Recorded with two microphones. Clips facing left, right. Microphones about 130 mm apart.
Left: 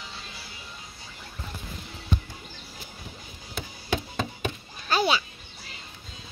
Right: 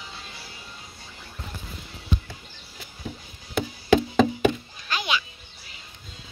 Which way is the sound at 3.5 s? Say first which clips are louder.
Right 11 dB; 90° right.